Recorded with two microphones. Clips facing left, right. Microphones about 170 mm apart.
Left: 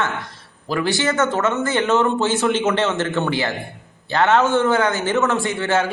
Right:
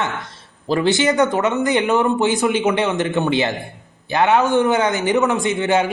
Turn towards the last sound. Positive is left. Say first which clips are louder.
# right 2 dB
turn(degrees=-15)  # may be behind; listen again after turning